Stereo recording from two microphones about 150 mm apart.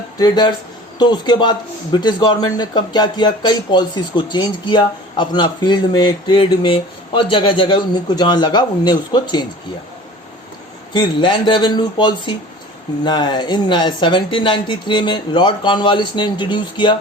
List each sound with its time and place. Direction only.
0.2 s a man's voice: 30° left (ahead or behind)
10.9 s speech: 30° left (ahead or behind)